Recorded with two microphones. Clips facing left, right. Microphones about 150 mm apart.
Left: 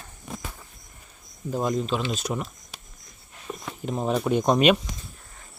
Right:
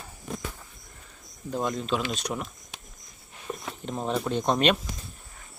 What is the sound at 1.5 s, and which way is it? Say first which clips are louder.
Speech: left 3 dB; 5° left (ahead or behind).